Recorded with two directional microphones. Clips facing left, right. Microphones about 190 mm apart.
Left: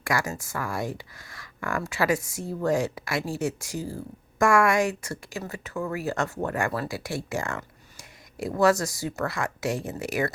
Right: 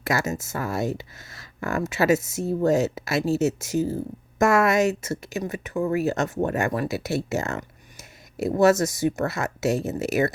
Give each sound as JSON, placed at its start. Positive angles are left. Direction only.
{"t": 0.0, "sound": "speech", "side_deg": -25}